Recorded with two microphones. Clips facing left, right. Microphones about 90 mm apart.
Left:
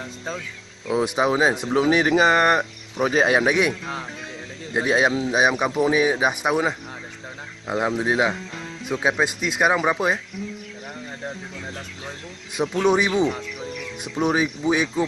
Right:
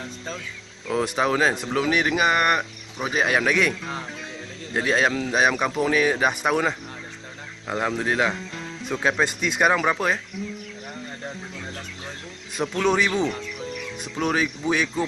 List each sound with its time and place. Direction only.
0.8 s speech: 10° left (ahead or behind)
1.7 s speech: 25° left (ahead or behind)
3.3 s speech: 20° left (ahead or behind)
4.7 s speech: 15° left (ahead or behind)
12.5 s speech: 10° left (ahead or behind)